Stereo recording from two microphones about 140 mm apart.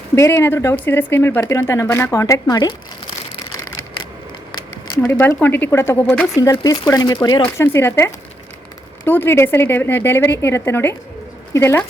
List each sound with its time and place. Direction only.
0.2 s speech: 20° left (ahead or behind)
4.5 s a sound: 25° left (ahead or behind)
5.4 s a woman's voice: 15° left (ahead or behind)
6.3 s speech: 25° left (ahead or behind)
7.4 s a woman's voice: 20° left (ahead or behind)